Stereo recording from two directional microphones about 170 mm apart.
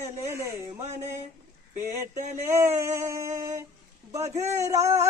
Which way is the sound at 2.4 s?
15° right (ahead or behind).